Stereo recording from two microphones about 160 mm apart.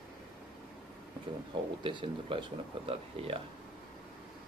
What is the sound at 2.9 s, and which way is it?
Speech, 35° right (ahead or behind).